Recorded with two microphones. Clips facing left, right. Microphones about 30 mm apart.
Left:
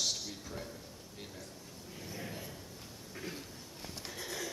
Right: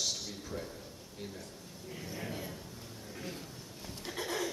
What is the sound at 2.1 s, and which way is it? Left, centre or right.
Speech, centre.